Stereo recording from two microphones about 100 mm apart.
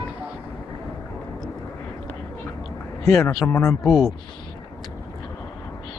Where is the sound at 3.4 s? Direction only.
25° left (ahead or behind).